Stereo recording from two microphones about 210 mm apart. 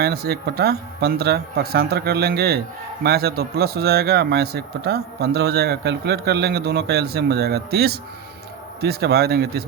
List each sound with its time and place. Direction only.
0.0 s speech: 50° right (ahead or behind)